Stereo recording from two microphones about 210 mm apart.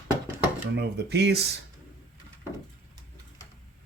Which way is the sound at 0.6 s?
55° right (ahead or behind).